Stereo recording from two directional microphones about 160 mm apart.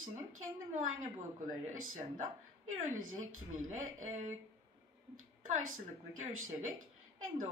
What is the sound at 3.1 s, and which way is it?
Speech, 50° right (ahead or behind).